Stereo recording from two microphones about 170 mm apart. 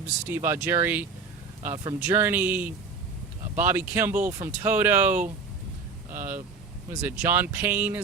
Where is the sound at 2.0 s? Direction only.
10° right (ahead or behind).